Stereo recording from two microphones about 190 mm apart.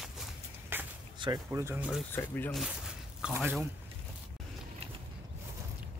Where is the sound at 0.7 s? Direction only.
10° right (ahead or behind).